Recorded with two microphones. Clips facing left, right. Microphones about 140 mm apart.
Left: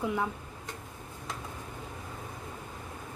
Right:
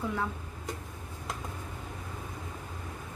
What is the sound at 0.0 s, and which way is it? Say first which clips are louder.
Speech: left 2 dB; 15° left (ahead or behind).